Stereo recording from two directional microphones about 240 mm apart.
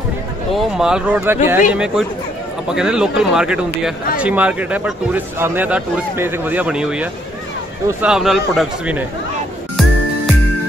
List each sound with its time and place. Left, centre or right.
0.6 s speech: centre